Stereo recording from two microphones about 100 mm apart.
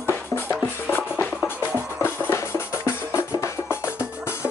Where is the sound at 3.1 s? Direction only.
30° left (ahead or behind).